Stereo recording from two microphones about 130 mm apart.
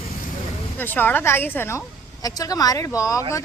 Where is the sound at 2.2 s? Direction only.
30° left (ahead or behind).